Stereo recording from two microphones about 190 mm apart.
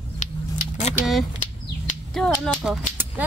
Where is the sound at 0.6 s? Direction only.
40° left (ahead or behind).